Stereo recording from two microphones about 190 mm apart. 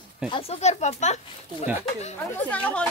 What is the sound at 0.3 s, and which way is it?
Speech, 35° left (ahead or behind).